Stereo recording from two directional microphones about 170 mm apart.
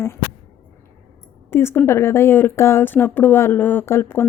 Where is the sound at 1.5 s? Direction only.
15° left (ahead or behind).